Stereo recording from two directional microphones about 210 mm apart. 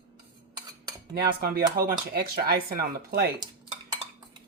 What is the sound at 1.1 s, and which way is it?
Speech, 50° right (ahead or behind).